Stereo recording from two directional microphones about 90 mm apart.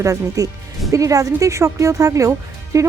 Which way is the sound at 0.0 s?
35° right (ahead or behind).